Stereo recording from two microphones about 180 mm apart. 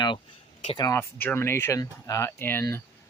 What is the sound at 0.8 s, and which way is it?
Speech, 15° left (ahead or behind).